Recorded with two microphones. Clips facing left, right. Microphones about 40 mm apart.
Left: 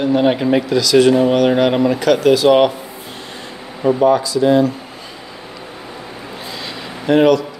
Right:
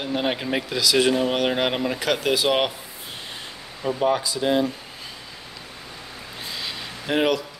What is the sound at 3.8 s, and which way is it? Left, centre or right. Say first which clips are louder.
Speech: left 11 dB; left.